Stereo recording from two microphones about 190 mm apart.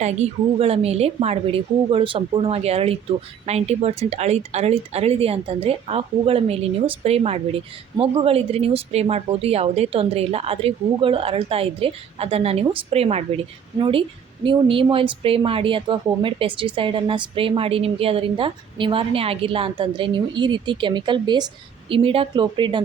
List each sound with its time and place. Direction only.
0.0 s a woman's voice: 35° right (ahead or behind)